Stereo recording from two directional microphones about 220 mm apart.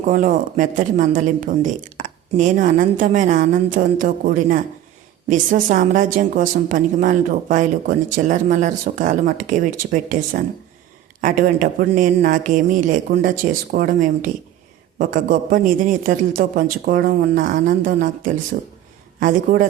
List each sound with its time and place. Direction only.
0.0 s a woman's voice: 35° right (ahead or behind)